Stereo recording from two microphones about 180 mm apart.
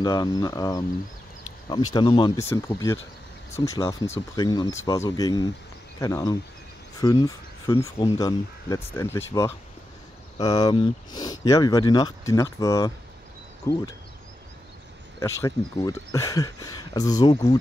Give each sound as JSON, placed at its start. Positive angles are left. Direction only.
{"t": 0.0, "sound": "speech", "side_deg": 25}
{"t": 15.1, "sound": "speech", "side_deg": 15}